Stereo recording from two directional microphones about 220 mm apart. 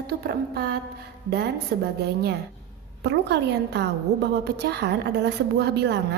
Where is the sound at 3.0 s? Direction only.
50° right (ahead or behind).